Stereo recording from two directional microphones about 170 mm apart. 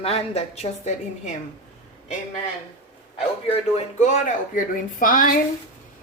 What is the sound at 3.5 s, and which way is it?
A woman's voice, 40° left (ahead or behind).